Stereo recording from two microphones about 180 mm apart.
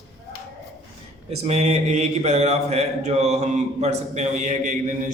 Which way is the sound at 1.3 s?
35° right (ahead or behind).